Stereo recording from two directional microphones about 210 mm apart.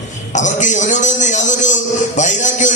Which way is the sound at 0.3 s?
35° left (ahead or behind).